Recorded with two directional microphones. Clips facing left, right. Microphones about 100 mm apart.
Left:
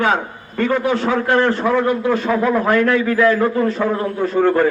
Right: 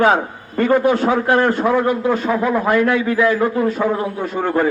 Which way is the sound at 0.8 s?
45° right (ahead or behind).